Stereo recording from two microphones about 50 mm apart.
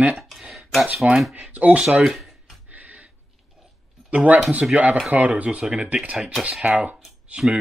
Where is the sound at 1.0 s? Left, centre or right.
Right.